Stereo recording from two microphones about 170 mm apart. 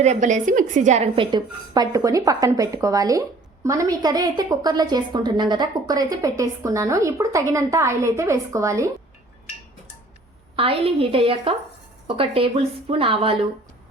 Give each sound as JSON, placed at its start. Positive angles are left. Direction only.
{"t": 0.0, "sound": "a woman's voice", "side_deg": -45}
{"t": 10.5, "sound": "a woman's voice", "side_deg": -35}